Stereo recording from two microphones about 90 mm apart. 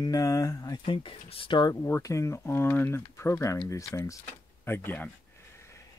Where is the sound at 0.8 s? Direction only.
75° left (ahead or behind).